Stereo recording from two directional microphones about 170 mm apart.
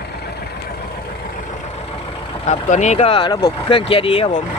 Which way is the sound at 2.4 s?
40° left (ahead or behind).